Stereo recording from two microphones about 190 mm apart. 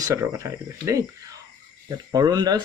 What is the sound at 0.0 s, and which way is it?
Speech, 15° right (ahead or behind).